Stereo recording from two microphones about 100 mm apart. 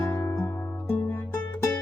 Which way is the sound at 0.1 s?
30° left (ahead or behind).